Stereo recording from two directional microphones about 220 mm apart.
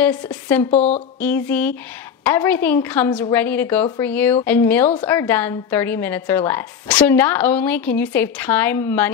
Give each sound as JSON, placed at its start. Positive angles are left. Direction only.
{"t": 0.0, "sound": "a woman's voice", "side_deg": 5}
{"t": 0.7, "sound": "speech", "side_deg": 30}
{"t": 1.2, "sound": "a woman's voice", "side_deg": 5}